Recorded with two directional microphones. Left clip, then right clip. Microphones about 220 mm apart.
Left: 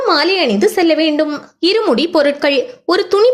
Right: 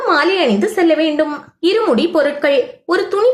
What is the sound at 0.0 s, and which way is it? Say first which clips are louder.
A woman's voice: even; 35° left (ahead or behind).